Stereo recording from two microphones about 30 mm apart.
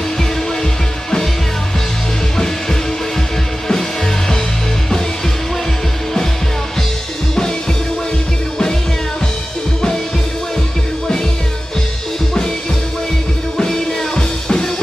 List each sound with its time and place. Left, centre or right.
2.3 s music: centre
13.6 s music: left